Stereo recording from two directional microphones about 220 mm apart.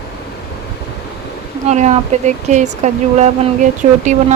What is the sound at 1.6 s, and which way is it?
Speech, 30° right (ahead or behind).